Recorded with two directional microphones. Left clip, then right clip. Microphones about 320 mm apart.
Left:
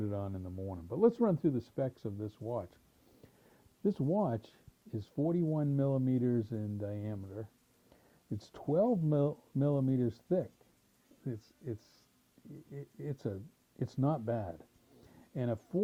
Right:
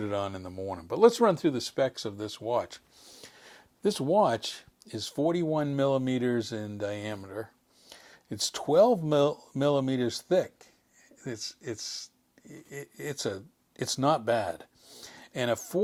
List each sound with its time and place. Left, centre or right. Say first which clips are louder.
0.0 s speech: right 8 dB; centre
3.4 s a sound: right 6 dB; centre
4.2 s speech: right 11 dB; centre
8.8 s speech: right 10 dB; centre
9.0 s speech: right 8 dB; centre
14.3 s a sound: right 10 dB; centre